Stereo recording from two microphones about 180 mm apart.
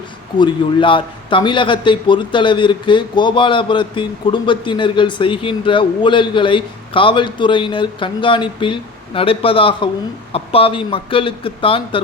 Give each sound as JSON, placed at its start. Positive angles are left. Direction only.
{"t": 0.3, "sound": "a man's voice", "side_deg": 25}